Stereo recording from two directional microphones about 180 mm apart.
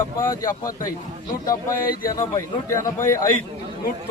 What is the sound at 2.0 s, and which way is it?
Speech, 20° left (ahead or behind).